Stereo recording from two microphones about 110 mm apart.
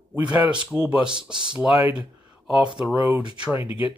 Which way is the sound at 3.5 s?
50° left (ahead or behind).